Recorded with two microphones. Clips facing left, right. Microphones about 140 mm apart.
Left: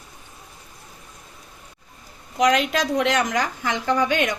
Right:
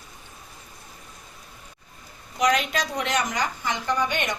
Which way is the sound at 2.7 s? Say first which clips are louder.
Left 6 dB; 90° left.